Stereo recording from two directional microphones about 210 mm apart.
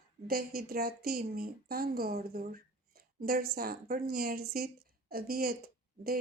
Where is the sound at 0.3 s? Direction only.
45° right (ahead or behind).